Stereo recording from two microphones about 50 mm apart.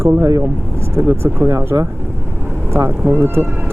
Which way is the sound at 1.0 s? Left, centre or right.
Right.